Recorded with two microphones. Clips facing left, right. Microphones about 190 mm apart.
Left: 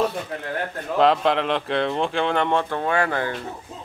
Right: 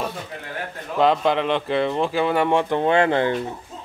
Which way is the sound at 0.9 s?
Centre (ahead or behind).